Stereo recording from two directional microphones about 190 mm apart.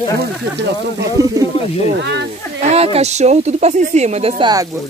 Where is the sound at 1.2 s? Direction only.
15° right (ahead or behind).